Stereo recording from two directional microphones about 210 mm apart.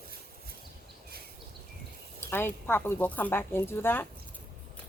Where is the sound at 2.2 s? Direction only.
10° left (ahead or behind).